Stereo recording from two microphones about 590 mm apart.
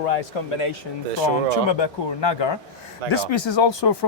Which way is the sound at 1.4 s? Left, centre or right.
Left.